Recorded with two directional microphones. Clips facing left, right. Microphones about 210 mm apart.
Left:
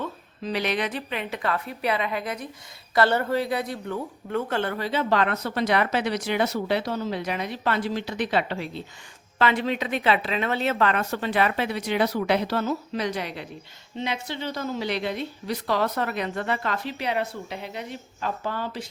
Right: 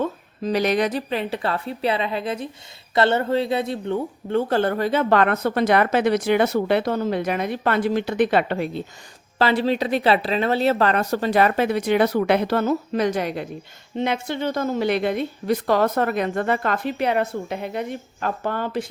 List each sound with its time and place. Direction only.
0.0 s speech: 45° right (ahead or behind)
9.4 s speech: 35° right (ahead or behind); by 18.9 s 55° right (ahead or behind)